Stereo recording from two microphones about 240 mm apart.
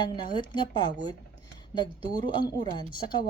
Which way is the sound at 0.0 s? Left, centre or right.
Centre.